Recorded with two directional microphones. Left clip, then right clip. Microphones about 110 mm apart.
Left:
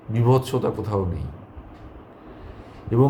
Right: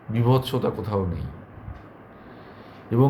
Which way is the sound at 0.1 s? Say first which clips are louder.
Left 2 dB; 15° left (ahead or behind).